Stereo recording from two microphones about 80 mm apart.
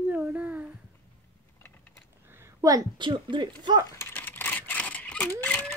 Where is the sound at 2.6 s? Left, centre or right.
Right.